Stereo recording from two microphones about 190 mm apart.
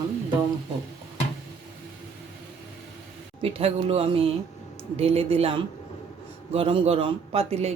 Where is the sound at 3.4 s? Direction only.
30° right (ahead or behind).